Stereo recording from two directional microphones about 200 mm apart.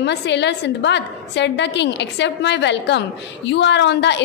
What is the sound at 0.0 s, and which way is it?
A woman's voice, 60° left (ahead or behind).